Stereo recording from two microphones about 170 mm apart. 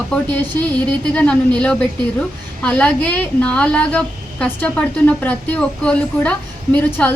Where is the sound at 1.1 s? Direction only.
5° left (ahead or behind).